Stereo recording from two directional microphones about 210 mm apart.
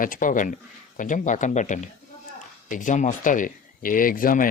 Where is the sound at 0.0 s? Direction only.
40° left (ahead or behind).